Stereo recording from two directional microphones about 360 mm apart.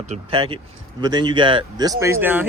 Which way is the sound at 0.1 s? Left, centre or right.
Centre.